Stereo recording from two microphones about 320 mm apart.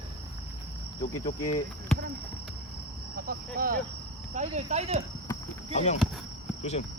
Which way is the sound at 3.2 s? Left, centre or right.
Right.